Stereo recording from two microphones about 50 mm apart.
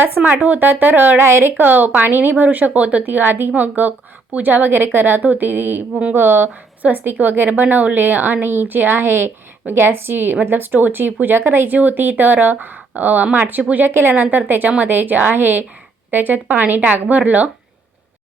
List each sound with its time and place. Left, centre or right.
0.2 s a woman's voice: right
1.3 s a woman's voice: right
13.6 s speech: right
13.8 s a woman's voice: right